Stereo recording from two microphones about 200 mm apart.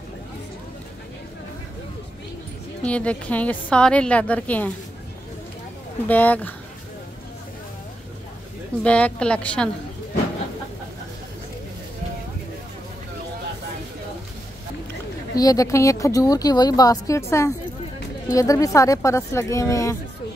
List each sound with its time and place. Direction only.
2.8 s speech: 5° left (ahead or behind)
6.0 s speech: 10° left (ahead or behind)
8.8 s a woman's voice: 5° left (ahead or behind)
15.3 s speech: 15° left (ahead or behind)